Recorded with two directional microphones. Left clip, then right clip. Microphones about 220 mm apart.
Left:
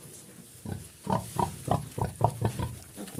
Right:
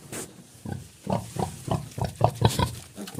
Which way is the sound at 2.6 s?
45° right (ahead or behind).